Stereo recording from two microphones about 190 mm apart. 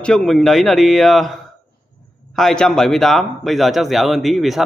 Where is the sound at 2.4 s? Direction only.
Centre (ahead or behind).